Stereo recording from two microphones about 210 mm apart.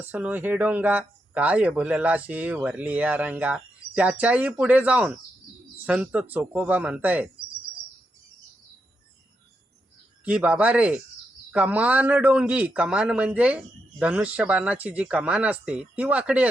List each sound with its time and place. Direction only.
0.0 s speech: 10° right (ahead or behind)
10.2 s speech: 5° right (ahead or behind)